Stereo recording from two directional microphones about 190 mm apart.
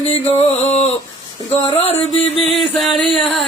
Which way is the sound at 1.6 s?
30° left (ahead or behind).